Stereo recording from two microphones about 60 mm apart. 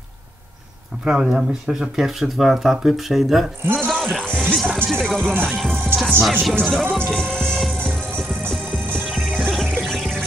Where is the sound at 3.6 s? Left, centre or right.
Right.